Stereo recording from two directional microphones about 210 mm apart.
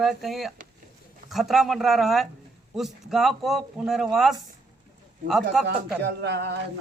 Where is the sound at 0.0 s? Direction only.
Centre (ahead or behind).